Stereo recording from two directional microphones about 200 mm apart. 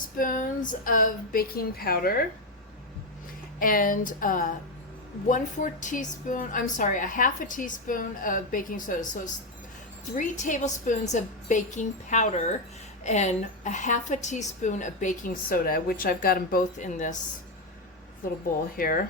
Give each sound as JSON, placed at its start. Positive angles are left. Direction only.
{"t": 0.2, "sound": "speech", "side_deg": 40}
{"t": 3.6, "sound": "a woman's voice", "side_deg": 45}
{"t": 18.8, "sound": "speech", "side_deg": 45}